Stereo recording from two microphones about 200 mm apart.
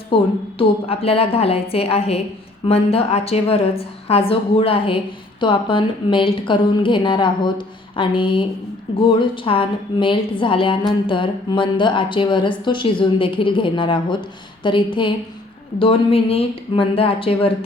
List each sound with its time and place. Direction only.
0.1 s a woman's voice: 25° left (ahead or behind)